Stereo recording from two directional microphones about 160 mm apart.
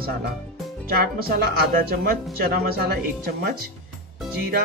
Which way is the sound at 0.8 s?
70° right (ahead or behind).